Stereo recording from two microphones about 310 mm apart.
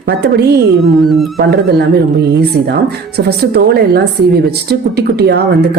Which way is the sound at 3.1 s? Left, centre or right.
Right.